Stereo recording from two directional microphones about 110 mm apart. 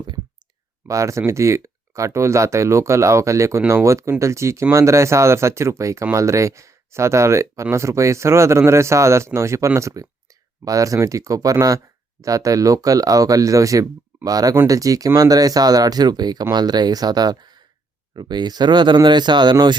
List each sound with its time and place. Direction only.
0.9 s speech: 30° right (ahead or behind)